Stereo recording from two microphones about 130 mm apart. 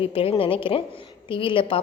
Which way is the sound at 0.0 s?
45° left (ahead or behind).